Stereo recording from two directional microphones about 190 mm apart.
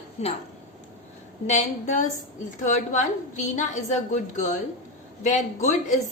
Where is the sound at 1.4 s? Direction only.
40° left (ahead or behind).